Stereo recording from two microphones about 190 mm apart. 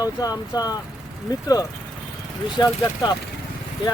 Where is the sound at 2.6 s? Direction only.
20° left (ahead or behind).